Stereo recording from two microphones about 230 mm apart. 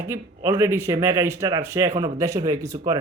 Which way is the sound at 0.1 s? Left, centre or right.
Centre.